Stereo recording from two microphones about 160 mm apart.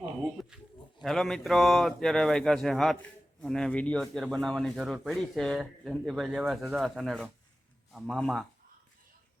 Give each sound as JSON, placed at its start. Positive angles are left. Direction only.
{"t": 0.4, "sound": "speech", "side_deg": 0}